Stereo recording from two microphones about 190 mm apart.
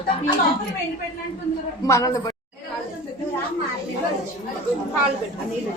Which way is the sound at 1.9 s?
15° left (ahead or behind).